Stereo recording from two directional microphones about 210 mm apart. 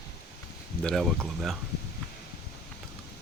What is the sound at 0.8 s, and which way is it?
Speech, centre (ahead or behind).